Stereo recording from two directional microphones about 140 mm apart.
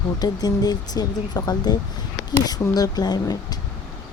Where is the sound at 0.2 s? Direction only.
30° left (ahead or behind).